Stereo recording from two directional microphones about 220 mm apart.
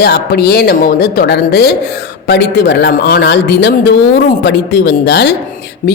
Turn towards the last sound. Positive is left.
turn(degrees=50)  # may be behind; listen again after turning